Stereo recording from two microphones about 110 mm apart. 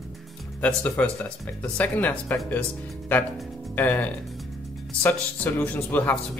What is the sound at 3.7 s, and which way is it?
Speech, 15° left (ahead or behind).